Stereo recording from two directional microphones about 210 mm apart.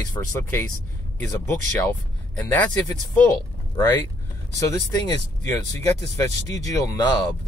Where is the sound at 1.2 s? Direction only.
10° left (ahead or behind).